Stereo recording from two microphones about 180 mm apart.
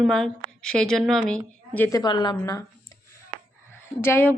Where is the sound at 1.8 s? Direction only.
20° left (ahead or behind).